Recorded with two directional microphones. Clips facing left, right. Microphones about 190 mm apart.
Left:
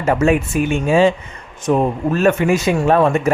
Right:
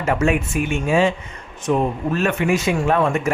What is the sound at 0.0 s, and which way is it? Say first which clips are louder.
Speech: left 4 dB; 35° left (ahead or behind).